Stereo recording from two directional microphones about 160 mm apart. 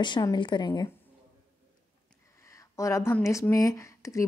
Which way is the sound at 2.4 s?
20° left (ahead or behind).